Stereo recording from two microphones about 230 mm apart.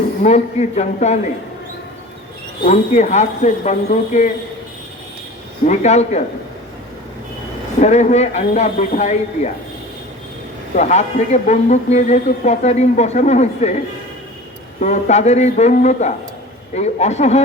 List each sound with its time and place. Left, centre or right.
0.2 s speech: left
2.6 s speech: left
5.6 s speech: left
7.8 s speech: left
10.8 s speech: left